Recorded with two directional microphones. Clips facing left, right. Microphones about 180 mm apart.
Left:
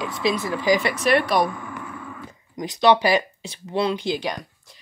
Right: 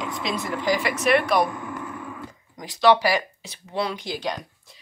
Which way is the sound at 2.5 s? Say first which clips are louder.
Left 1 dB; 20° left (ahead or behind).